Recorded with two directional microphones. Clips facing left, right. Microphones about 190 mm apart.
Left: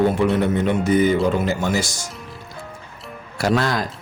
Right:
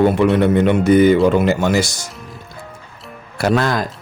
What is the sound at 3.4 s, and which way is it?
Speech, 55° right (ahead or behind).